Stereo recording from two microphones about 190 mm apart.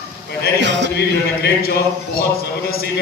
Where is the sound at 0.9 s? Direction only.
55° left (ahead or behind).